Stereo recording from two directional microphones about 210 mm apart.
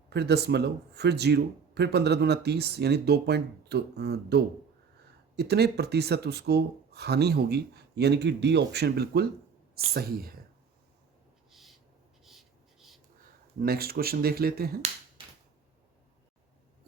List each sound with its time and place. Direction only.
0.1 s speech: 50° right (ahead or behind)
12.2 s writing: centre (ahead or behind)
13.6 s speech: 45° right (ahead or behind)